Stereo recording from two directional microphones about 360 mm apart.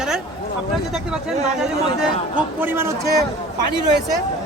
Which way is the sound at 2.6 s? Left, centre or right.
Centre.